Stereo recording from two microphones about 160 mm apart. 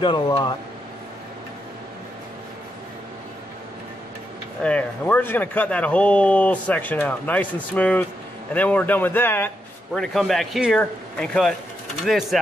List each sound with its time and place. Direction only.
0.0 s speech: 30° left (ahead or behind)
4.6 s a man's voice: 10° left (ahead or behind)